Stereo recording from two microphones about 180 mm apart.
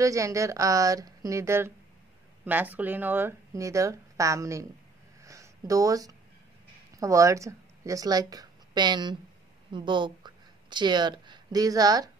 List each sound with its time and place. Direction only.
0.0 s speech: 15° right (ahead or behind)
5.2 s a sound: 15° right (ahead or behind)
7.0 s speech: 15° right (ahead or behind)